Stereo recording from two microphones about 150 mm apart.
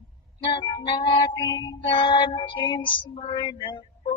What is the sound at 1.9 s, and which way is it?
Child singing, 35° left (ahead or behind).